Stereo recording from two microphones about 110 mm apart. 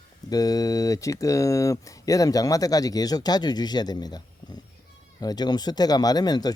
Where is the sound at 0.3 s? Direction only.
35° left (ahead or behind).